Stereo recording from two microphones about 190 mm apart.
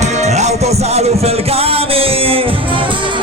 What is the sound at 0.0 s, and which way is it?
Music, 35° right (ahead or behind).